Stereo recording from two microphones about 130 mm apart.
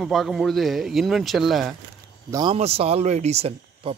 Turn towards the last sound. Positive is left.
turn(degrees=-50)  # may be behind; listen again after turning